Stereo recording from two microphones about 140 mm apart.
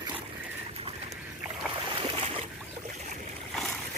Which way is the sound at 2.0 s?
45° right (ahead or behind).